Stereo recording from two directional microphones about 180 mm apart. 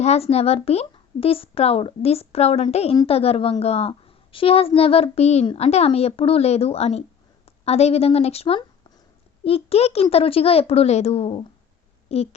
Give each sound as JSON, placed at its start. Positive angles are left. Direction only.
{"t": 0.0, "sound": "a woman's voice", "side_deg": 35}